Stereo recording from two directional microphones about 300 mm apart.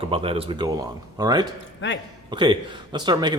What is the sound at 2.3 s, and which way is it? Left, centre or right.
A man's voice, centre.